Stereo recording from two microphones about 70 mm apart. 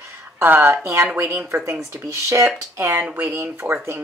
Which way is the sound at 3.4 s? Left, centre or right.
Right.